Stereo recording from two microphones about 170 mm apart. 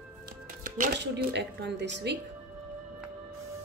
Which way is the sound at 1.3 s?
90° right.